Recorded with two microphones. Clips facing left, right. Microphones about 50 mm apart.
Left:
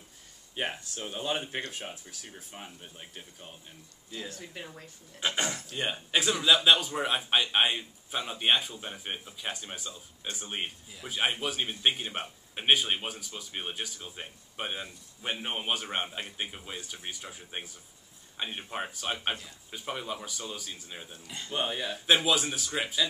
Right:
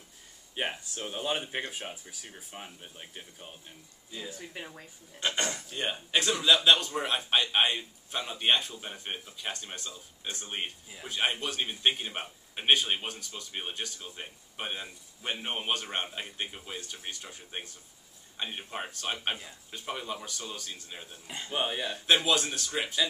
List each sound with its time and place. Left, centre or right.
0.6 s a man's voice: centre
5.2 s a man's voice: centre
21.3 s speech: right
21.5 s a man's voice: centre